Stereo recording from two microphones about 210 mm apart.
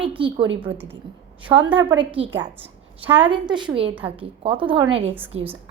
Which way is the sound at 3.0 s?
10° right (ahead or behind).